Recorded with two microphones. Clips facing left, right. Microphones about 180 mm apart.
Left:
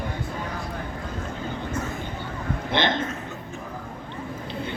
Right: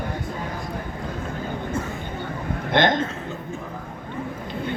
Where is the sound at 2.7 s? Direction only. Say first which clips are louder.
Right 5 dB; 45° right (ahead or behind).